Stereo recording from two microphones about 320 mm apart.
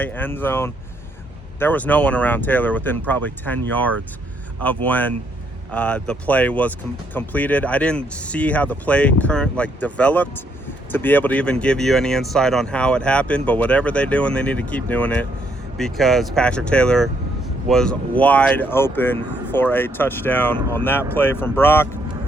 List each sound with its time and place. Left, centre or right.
0.0 s speech: centre